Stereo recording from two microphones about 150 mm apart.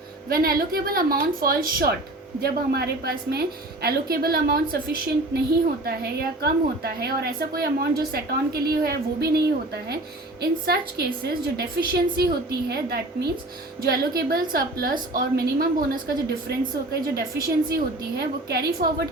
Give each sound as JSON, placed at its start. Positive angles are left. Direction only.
{"t": 0.3, "sound": "a woman's voice", "side_deg": -75}
{"t": 2.4, "sound": "a woman's voice", "side_deg": -90}
{"t": 10.4, "sound": "a woman's voice", "side_deg": -90}
{"t": 14.5, "sound": "a woman's voice", "side_deg": -75}